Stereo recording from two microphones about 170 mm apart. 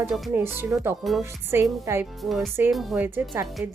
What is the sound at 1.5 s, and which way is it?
Speech, 15° right (ahead or behind).